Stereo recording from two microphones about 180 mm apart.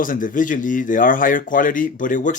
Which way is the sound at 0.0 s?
50° left (ahead or behind).